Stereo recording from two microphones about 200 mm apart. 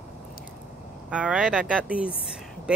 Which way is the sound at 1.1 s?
5° right (ahead or behind).